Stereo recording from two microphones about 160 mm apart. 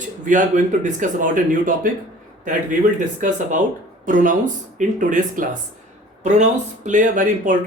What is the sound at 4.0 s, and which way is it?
Speech, 55° right (ahead or behind).